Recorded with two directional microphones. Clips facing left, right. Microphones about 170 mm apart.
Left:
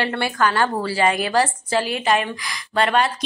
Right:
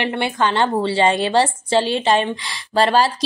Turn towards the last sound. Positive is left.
turn(degrees=-30)  # may be behind; listen again after turning